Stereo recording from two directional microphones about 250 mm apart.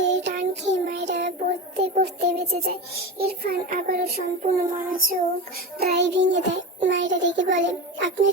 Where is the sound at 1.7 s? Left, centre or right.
Right.